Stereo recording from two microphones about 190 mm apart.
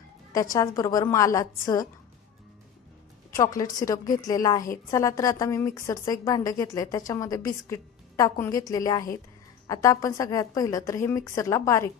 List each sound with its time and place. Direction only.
0.3 s a woman's voice: 20° left (ahead or behind)
3.3 s a woman's voice: 15° left (ahead or behind)